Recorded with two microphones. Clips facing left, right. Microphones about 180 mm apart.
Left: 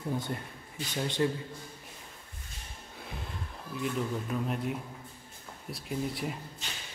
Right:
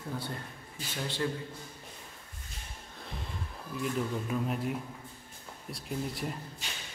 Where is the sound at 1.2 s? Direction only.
25° left (ahead or behind).